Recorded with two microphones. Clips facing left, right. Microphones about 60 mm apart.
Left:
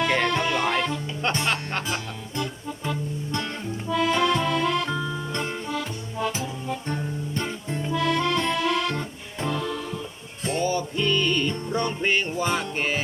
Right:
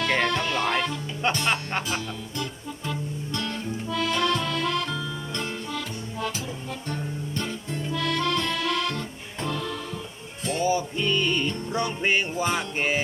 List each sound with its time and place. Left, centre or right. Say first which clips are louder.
0.0 s music: left 2 dB; centre
1.5 s music: even; centre
3.3 s music: left 1 dB; left
3.8 s accordion: left 4 dB; centre
4.9 s music: left 3 dB; left
5.7 s music: left 2 dB; centre
10.6 s music: right 1 dB; centre